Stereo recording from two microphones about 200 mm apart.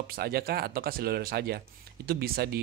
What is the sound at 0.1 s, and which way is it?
Speech, 50° right (ahead or behind).